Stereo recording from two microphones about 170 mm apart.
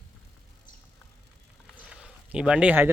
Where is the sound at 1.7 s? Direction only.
5° right (ahead or behind).